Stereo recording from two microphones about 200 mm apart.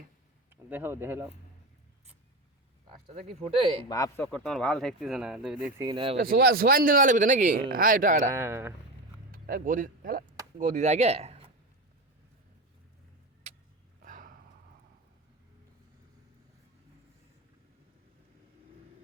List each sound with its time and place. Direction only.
0.5 s speech: 10° right (ahead or behind)
3.1 s speech: 30° right (ahead or behind)
3.8 s speech: 15° left (ahead or behind); by 5.9 s 10° right (ahead or behind)
5.9 s speech: 25° right (ahead or behind)
6.1 s speech: 50° right (ahead or behind)
8.3 s speech: 10° right (ahead or behind)
9.3 s speech: 45° right (ahead or behind)
14.0 s a sound: 40° right (ahead or behind)